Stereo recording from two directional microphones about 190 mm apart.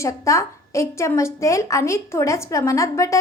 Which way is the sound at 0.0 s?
15° left (ahead or behind).